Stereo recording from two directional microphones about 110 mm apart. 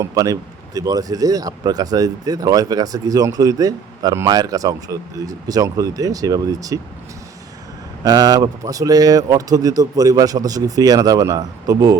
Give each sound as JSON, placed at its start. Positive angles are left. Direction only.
{"t": 0.0, "sound": "speech", "side_deg": -30}
{"t": 8.0, "sound": "speech", "side_deg": -35}